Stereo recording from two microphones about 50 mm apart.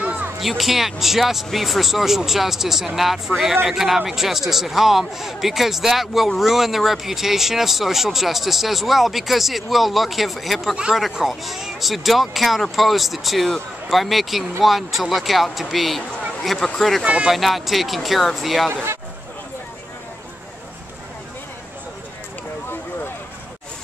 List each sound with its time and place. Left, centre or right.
0.4 s a man's voice: centre
3.3 s a man's voice: right
3.6 s a man's voice: centre